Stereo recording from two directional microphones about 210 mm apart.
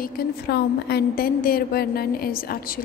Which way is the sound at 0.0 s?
50° left (ahead or behind).